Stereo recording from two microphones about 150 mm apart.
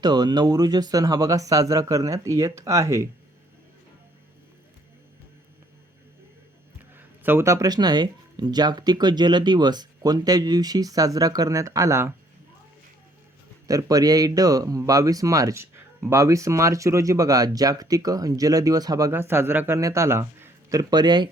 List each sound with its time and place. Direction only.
0.0 s speech: 30° right (ahead or behind)
6.9 s speech: 15° right (ahead or behind)
13.7 s speech: 25° right (ahead or behind)